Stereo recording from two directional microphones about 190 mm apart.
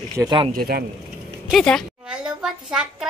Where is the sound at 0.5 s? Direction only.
50° right (ahead or behind).